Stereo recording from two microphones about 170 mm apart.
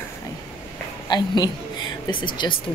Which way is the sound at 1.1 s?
25° left (ahead or behind).